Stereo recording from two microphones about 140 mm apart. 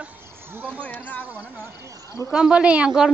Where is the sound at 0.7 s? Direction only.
10° left (ahead or behind).